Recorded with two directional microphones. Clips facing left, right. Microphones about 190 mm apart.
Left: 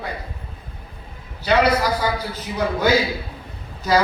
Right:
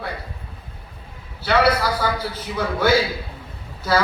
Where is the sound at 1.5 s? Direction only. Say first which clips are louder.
Left 1 dB; 15° left (ahead or behind).